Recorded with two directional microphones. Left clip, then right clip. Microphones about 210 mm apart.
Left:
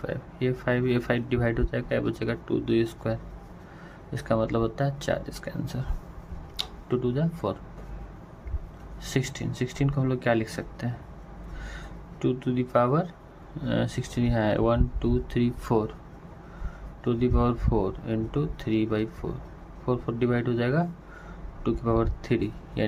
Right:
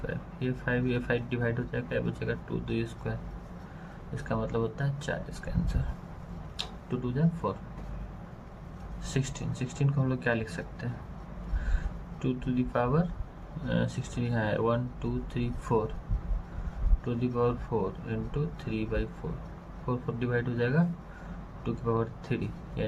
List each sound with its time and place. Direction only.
0.3 s speech: 40° left (ahead or behind)
9.1 s speech: 35° left (ahead or behind)
12.2 s speech: 40° left (ahead or behind)
17.1 s speech: 40° left (ahead or behind)